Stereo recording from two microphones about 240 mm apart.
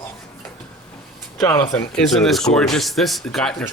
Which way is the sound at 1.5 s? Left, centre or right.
Centre.